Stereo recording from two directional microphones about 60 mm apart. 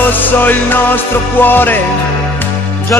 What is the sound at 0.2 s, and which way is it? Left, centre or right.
Music, left.